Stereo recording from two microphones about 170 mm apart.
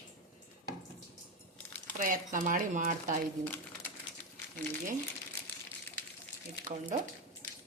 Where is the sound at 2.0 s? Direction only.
50° right (ahead or behind).